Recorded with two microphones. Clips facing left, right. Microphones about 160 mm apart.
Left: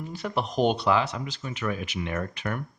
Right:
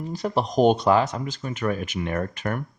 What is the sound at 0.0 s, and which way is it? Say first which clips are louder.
Speech: right 4 dB; 35° right (ahead or behind).